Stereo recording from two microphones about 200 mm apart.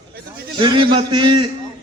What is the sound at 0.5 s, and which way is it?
Speech, 25° right (ahead or behind).